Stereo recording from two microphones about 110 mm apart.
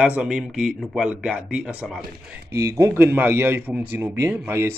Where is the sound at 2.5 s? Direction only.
30° right (ahead or behind).